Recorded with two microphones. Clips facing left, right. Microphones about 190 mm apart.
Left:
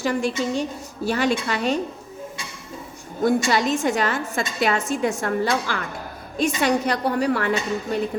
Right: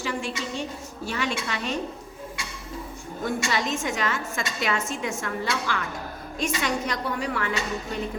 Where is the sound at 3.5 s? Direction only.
35° left (ahead or behind).